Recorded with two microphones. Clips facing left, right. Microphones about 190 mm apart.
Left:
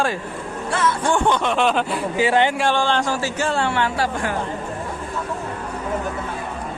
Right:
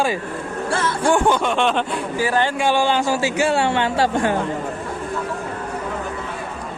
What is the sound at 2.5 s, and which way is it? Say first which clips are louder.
A man's voice: right 1 dB; 5° right (ahead or behind).